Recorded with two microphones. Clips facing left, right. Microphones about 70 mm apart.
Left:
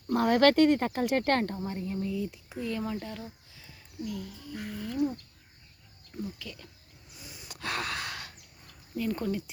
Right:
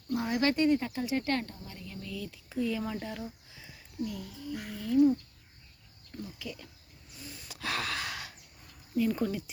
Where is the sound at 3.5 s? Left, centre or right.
Centre.